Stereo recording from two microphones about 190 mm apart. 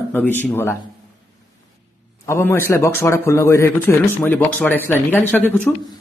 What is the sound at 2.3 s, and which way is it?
Speech, 15° left (ahead or behind).